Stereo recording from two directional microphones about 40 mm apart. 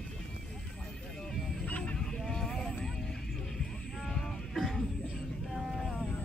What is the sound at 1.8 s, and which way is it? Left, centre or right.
Honk, left.